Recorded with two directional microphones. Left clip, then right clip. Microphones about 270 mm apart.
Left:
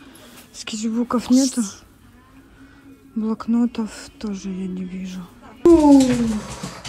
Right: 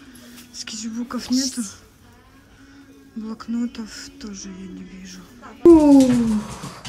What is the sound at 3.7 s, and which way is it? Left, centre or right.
Speech, centre.